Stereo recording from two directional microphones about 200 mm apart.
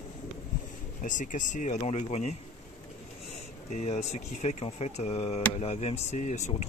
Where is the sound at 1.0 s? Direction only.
40° left (ahead or behind).